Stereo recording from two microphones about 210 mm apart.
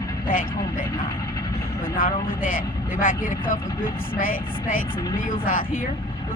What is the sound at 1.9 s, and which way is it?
Speech, 40° left (ahead or behind).